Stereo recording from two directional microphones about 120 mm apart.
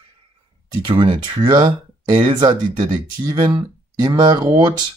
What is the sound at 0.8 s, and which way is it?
Speech, 40° right (ahead or behind).